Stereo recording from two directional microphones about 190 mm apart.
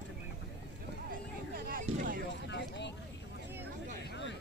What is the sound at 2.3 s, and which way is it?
Vehicle, 65° left (ahead or behind).